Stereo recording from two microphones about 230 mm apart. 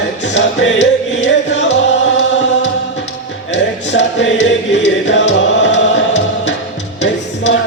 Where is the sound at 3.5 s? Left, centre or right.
Left.